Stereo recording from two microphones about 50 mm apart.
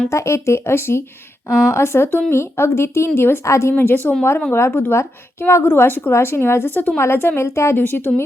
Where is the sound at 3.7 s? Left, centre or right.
Left.